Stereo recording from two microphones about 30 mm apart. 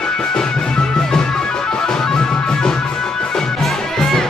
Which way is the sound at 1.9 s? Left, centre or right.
Centre.